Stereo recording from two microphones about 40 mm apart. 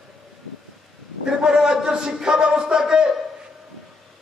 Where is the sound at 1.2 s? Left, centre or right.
Centre.